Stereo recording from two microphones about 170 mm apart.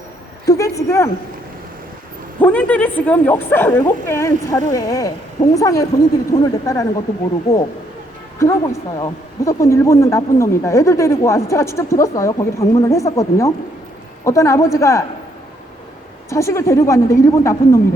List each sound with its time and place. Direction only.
0.4 s a woman's voice: 20° left (ahead or behind)
2.4 s speech: 10° left (ahead or behind)
8.4 s speech: 15° left (ahead or behind)
16.3 s speech: 15° left (ahead or behind)